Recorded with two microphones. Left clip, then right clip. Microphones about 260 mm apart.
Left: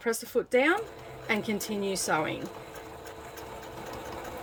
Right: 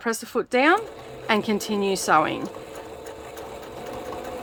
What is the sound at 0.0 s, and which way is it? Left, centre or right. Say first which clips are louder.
Speech: right 3 dB; centre.